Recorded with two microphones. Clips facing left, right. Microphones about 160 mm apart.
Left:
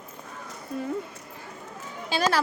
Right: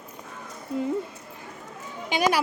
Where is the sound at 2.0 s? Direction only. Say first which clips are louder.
Right 1 dB; 15° right (ahead or behind).